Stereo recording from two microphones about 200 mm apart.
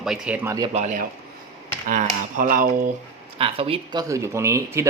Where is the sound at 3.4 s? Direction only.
30° right (ahead or behind).